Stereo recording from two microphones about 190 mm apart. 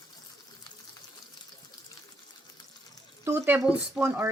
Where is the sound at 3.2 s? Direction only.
10° right (ahead or behind).